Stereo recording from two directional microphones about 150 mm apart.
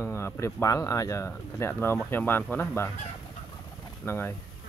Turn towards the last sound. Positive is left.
turn(degrees=15)  # may be behind; listen again after turning